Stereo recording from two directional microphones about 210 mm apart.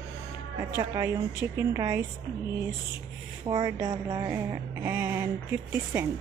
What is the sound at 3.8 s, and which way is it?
A woman's voice, 15° right (ahead or behind).